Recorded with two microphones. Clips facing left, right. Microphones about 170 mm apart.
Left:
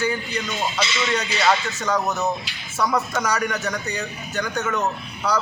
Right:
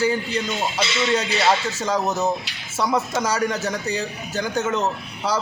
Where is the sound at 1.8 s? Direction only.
25° right (ahead or behind).